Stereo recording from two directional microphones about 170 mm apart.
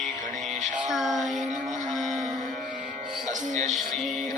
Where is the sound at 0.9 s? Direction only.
Centre (ahead or behind).